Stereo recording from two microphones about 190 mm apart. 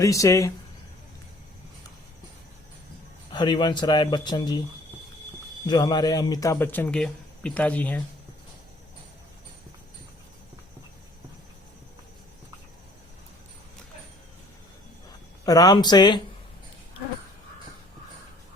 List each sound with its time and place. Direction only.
0.0 s a man's voice: 15° left (ahead or behind)
3.3 s speech: 25° left (ahead or behind)
5.6 s a man's voice: 20° left (ahead or behind)
15.4 s speech: 20° left (ahead or behind)